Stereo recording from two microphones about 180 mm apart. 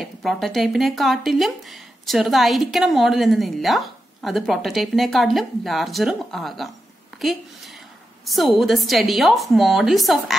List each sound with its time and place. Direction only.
0.0 s a woman's voice: centre (ahead or behind)